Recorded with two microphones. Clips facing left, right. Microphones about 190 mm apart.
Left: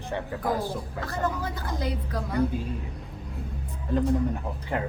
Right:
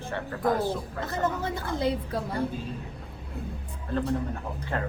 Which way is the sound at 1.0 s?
20° right (ahead or behind).